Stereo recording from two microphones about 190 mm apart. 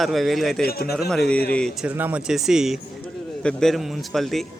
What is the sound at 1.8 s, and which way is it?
Speech, 10° right (ahead or behind).